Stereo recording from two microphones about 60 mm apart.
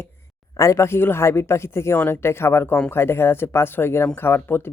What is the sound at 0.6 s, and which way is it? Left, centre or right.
Speech, left.